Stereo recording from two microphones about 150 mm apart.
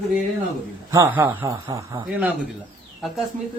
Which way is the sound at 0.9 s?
20° right (ahead or behind).